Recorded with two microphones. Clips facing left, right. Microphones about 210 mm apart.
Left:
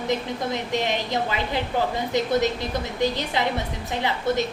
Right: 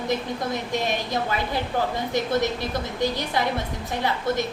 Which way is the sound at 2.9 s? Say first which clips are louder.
Left 1 dB; 20° left (ahead or behind).